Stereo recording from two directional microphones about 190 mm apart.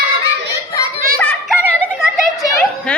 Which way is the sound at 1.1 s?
5° left (ahead or behind).